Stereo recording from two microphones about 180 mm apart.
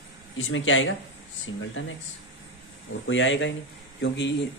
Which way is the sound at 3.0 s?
90° left.